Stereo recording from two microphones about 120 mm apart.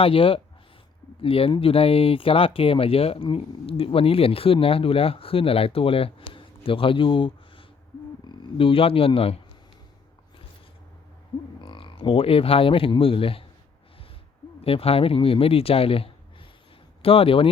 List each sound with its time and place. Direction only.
0.0 s speech: 50° left (ahead or behind)
11.6 s speech: 45° left (ahead or behind)
14.6 s speech: 55° left (ahead or behind)